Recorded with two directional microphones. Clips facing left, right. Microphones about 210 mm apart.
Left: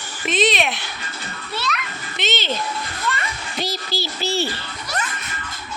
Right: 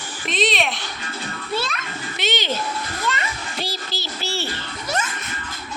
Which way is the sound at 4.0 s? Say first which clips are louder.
Left 6 dB; 15° left (ahead or behind).